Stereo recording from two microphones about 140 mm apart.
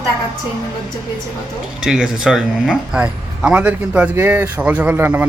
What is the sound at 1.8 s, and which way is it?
Speech, 5° right (ahead or behind).